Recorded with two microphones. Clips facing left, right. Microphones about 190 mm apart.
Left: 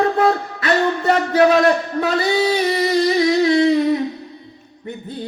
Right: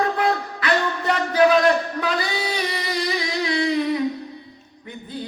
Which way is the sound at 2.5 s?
25° left (ahead or behind).